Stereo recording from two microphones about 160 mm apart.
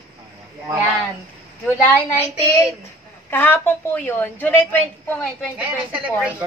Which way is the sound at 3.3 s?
10° left (ahead or behind).